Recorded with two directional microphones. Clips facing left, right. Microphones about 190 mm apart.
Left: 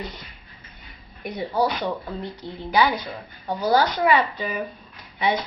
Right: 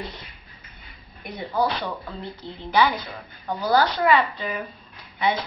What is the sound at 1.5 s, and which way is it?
Speech, 15° left (ahead or behind).